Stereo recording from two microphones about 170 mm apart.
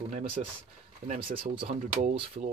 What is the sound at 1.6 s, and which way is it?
Speech, 45° right (ahead or behind).